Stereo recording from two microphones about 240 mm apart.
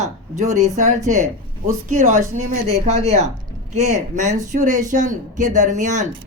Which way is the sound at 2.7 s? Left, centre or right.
Right.